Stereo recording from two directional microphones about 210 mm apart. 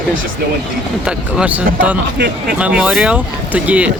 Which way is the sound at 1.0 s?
5° right (ahead or behind).